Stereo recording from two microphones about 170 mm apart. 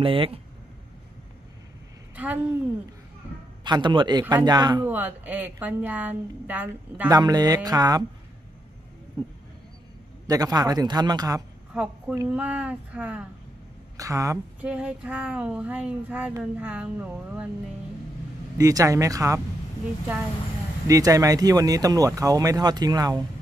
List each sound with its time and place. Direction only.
0.0 s speech: 30° right (ahead or behind)
2.1 s a woman's voice: 10° right (ahead or behind)
3.6 s speech: 25° right (ahead or behind)
4.8 s speech: 10° right (ahead or behind)
7.1 s speech: 20° right (ahead or behind)
9.2 s speech: 25° right (ahead or behind)
11.7 s speech: 5° right (ahead or behind)
13.9 s speech: 20° right (ahead or behind)
14.6 s speech: 5° right (ahead or behind)
18.6 s speech: 20° right (ahead or behind)
20.8 s speech: 20° right (ahead or behind)